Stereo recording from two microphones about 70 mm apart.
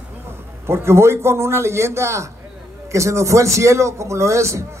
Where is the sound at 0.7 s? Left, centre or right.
Right.